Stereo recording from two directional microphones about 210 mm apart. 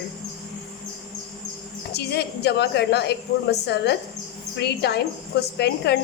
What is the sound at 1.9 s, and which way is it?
Speech, 50° left (ahead or behind).